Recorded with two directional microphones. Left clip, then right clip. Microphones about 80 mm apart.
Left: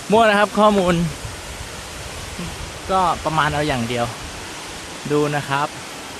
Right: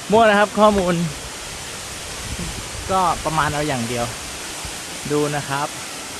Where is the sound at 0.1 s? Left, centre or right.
Left.